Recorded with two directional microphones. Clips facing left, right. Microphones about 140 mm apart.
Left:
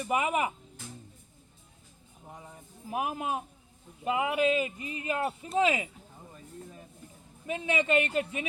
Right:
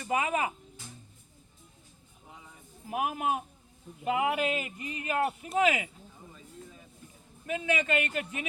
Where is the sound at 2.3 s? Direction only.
45° left (ahead or behind).